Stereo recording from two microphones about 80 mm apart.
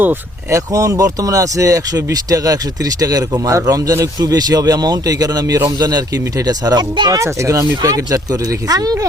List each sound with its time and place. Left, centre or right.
0.5 s a man's voice: right
7.2 s a man's voice: right